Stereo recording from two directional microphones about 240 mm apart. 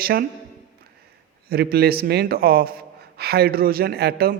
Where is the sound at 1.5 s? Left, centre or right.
Right.